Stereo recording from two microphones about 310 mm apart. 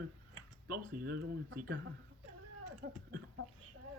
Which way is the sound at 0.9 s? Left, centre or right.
Right.